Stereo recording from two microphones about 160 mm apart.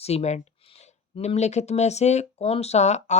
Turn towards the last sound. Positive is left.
turn(degrees=45)  # may be behind; listen again after turning